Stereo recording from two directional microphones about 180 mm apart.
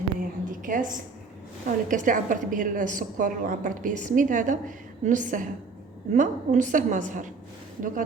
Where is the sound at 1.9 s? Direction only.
45° right (ahead or behind).